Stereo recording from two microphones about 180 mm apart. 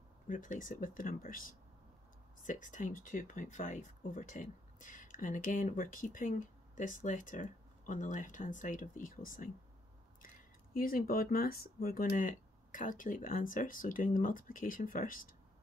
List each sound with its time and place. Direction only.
0.3 s speech: 50° left (ahead or behind)